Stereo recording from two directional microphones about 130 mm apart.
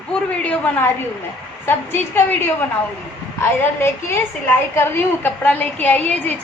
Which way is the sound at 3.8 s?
20° left (ahead or behind).